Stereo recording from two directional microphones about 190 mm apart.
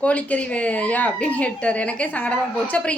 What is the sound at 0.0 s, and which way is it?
Speech, 5° left (ahead or behind).